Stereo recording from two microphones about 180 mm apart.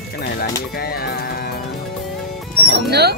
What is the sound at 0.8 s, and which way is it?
Speech, 60° left (ahead or behind).